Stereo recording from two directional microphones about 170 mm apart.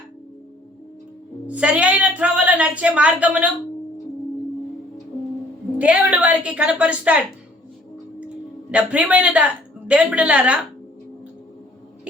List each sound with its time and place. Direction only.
1.5 s a woman's voice: 5° right (ahead or behind)
5.8 s a woman's voice: 5° right (ahead or behind)
8.7 s a woman's voice: 5° right (ahead or behind)